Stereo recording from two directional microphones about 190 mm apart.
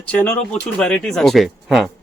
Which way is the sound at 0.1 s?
10° left (ahead or behind).